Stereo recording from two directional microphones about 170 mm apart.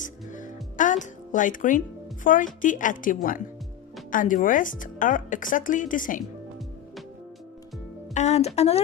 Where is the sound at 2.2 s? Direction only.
50° left (ahead or behind).